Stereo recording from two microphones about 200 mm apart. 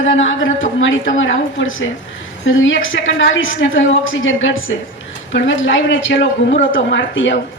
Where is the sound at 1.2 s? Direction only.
70° left (ahead or behind).